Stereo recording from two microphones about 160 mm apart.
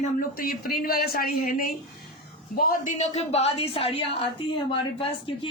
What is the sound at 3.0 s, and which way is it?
A woman's voice, 45° left (ahead or behind).